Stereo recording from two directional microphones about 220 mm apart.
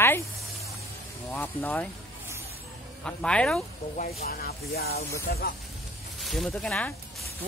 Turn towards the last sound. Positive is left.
turn(degrees=0)  # may be behind; listen again after turning